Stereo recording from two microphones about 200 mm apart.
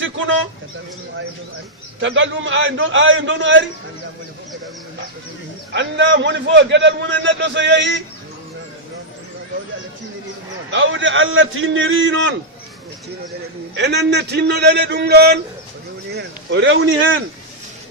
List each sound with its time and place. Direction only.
0.0 s a sound: 75° right (ahead or behind)
2.0 s a man's voice: 70° right (ahead or behind)
5.7 s a man's voice: 60° right (ahead or behind)
10.7 s a man's voice: 70° right (ahead or behind)
13.7 s a man's voice: 60° right (ahead or behind)
16.1 s a man's voice: 65° right (ahead or behind)